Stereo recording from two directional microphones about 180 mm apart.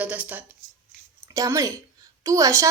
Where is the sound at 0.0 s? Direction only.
10° right (ahead or behind).